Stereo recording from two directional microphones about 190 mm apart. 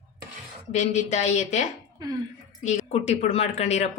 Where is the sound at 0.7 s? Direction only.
35° left (ahead or behind).